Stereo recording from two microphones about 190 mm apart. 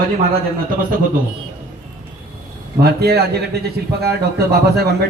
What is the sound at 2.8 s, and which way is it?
Speech, 55° right (ahead or behind).